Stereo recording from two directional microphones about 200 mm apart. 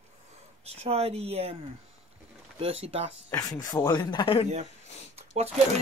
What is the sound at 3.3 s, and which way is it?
Speech, 15° left (ahead or behind).